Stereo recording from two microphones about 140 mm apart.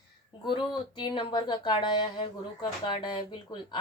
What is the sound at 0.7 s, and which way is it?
Speech, 35° left (ahead or behind).